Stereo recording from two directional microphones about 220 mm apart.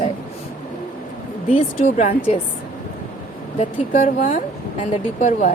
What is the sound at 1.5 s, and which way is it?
Speech, 30° left (ahead or behind).